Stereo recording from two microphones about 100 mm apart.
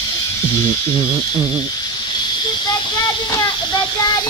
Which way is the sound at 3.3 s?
35° left (ahead or behind).